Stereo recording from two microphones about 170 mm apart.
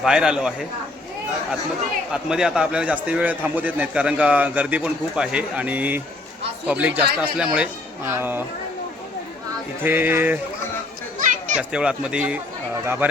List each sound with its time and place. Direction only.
0.0 s speech: 5° right (ahead or behind)
2.1 s a man's voice: 5° right (ahead or behind)
9.8 s a man's voice: 10° right (ahead or behind)
11.2 s children playing: 45° right (ahead or behind)
11.7 s a man's voice: 5° right (ahead or behind)